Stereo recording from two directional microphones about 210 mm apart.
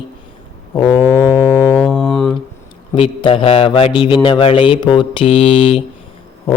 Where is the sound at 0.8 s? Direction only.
20° left (ahead or behind).